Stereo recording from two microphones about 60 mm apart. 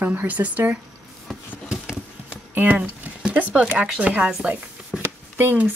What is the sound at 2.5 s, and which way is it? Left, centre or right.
Speech, right.